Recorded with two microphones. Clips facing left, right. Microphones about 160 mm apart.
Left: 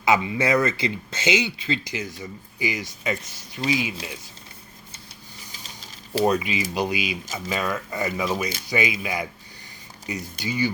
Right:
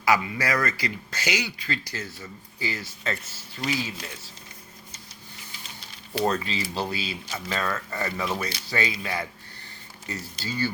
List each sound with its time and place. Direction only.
0.0 s speech: 20° left (ahead or behind)
6.2 s speech: 15° left (ahead or behind)